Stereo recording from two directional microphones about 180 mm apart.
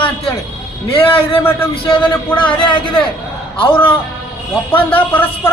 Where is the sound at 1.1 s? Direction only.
30° left (ahead or behind).